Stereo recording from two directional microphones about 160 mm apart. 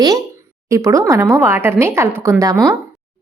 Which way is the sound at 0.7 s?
20° right (ahead or behind).